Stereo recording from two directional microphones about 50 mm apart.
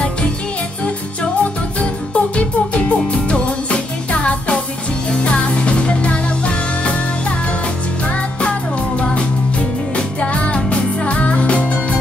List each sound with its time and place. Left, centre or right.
1.4 s music: left